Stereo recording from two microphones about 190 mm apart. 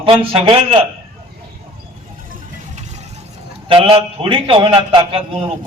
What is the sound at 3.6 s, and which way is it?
A man's voice, 30° right (ahead or behind).